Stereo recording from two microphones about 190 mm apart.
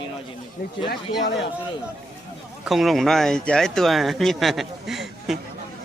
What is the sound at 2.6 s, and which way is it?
Speech, centre (ahead or behind).